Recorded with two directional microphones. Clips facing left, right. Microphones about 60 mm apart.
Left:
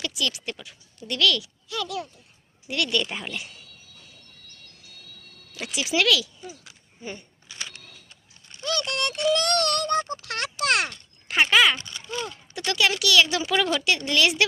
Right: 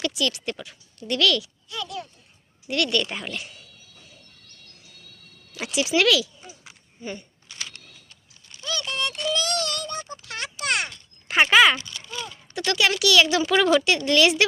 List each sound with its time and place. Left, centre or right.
0.0 s speech: centre
1.7 s a child's voice: left
2.6 s speech: centre
5.5 s speech: centre
7.0 s speech: centre
8.6 s a sound: left
11.3 s a sound: centre
11.8 s a sound: left
12.5 s speech: centre